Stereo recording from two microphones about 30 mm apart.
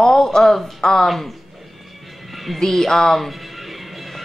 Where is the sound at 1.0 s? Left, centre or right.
Centre.